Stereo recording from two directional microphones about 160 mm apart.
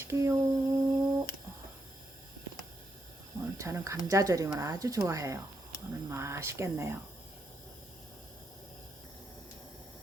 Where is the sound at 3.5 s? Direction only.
20° right (ahead or behind).